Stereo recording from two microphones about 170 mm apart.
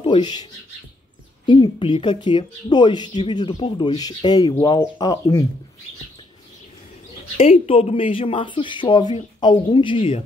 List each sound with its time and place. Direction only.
0.0 s speech: 25° left (ahead or behind)
7.3 s speech: 35° left (ahead or behind)